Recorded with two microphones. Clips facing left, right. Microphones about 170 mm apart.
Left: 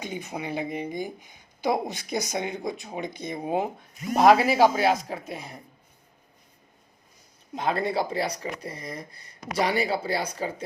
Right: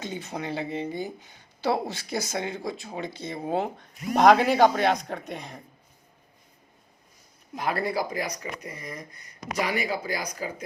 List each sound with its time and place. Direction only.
0.0 s speech: 15° left (ahead or behind)
7.5 s speech: 25° left (ahead or behind)